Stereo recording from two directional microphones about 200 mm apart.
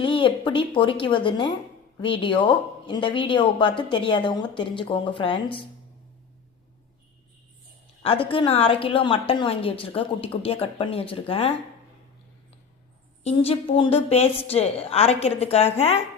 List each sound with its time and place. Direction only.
0.0 s a woman's voice: 25° left (ahead or behind)
8.0 s a woman's voice: 25° left (ahead or behind)
13.2 s a woman's voice: 30° left (ahead or behind)